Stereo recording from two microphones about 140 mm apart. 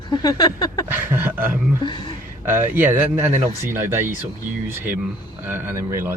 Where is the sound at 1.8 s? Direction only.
35° left (ahead or behind).